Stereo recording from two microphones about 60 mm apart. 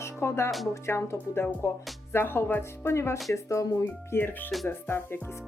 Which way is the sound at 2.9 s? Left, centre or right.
Left.